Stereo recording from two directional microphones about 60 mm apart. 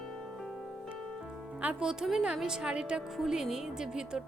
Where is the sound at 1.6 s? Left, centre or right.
Centre.